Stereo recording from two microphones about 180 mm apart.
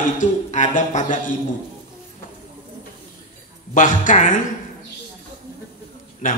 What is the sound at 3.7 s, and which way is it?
Speech, 45° left (ahead or behind).